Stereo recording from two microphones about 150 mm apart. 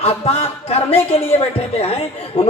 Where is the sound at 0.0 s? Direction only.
45° left (ahead or behind).